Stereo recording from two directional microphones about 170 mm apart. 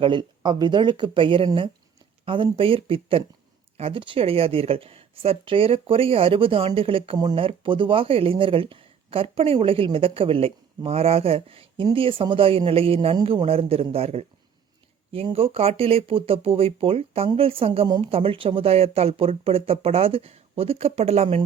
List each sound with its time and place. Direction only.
0.0 s speech: 25° right (ahead or behind)